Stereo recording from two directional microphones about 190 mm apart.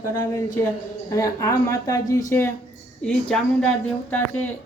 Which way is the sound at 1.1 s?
15° left (ahead or behind).